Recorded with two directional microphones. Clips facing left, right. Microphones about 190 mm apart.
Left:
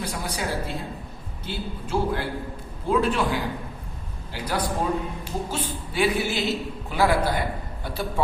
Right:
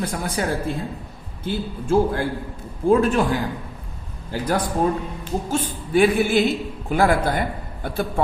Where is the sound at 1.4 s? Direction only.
50° right (ahead or behind).